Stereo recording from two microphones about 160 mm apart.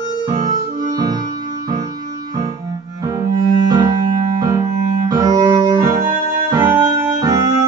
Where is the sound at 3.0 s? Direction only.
25° right (ahead or behind).